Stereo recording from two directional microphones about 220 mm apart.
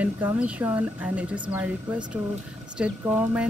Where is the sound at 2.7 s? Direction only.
10° right (ahead or behind).